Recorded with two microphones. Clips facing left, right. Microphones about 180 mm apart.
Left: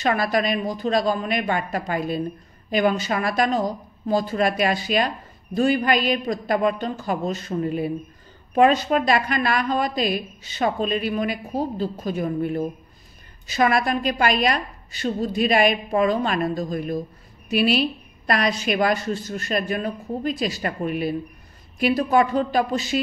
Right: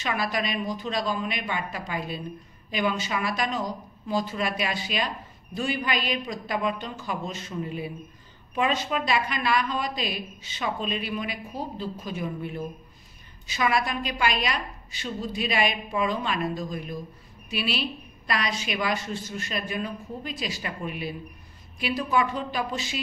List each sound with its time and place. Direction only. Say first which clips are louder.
0.0 s a woman's voice: left 7 dB; 50° left (ahead or behind)